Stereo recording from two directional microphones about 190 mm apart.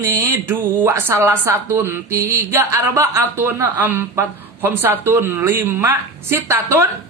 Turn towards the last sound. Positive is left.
turn(degrees=-15)  # may be behind; listen again after turning